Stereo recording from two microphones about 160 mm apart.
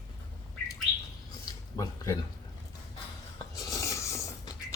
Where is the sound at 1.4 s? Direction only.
20° left (ahead or behind).